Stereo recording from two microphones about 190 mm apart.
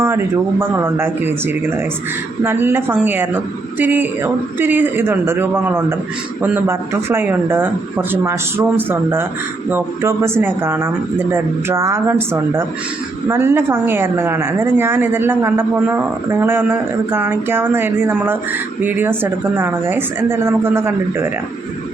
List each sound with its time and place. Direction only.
0.7 s a woman's voice: 10° right (ahead or behind)